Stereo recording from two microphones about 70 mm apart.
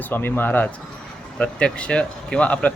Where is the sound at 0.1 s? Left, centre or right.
Left.